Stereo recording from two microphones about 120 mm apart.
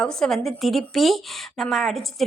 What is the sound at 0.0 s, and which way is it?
Speech, 5° left (ahead or behind).